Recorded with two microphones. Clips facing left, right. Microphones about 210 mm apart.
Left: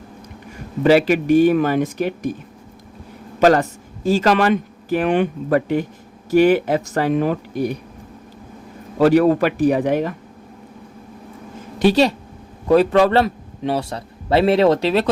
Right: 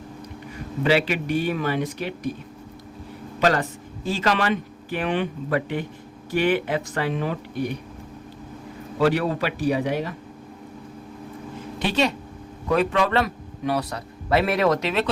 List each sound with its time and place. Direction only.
0.9 s speech: 45° left (ahead or behind)
3.4 s speech: 45° left (ahead or behind)
9.0 s speech: 45° left (ahead or behind)
11.8 s a man's voice: 35° left (ahead or behind)